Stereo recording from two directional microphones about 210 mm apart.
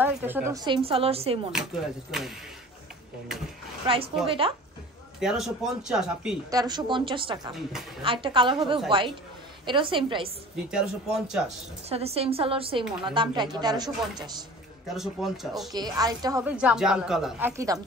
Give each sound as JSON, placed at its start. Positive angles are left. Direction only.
{"t": 0.0, "sound": "speech", "side_deg": -10}
{"t": 1.5, "sound": "speech", "side_deg": -5}
{"t": 3.8, "sound": "speech", "side_deg": -25}
{"t": 5.2, "sound": "speech", "side_deg": 0}
{"t": 6.5, "sound": "speech", "side_deg": -20}
{"t": 10.5, "sound": "speech", "side_deg": -5}
{"t": 11.9, "sound": "speech", "side_deg": -30}
{"t": 15.0, "sound": "speech", "side_deg": 0}
{"t": 15.7, "sound": "a woman's voice", "side_deg": -20}
{"t": 16.5, "sound": "speech", "side_deg": -5}